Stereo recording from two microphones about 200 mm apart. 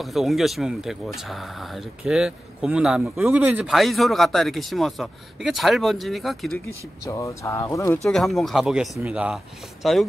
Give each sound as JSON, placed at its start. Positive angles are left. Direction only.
{"t": 0.0, "sound": "speech", "side_deg": 0}
{"t": 7.1, "sound": "speech", "side_deg": 15}
{"t": 8.0, "sound": "speech", "side_deg": 0}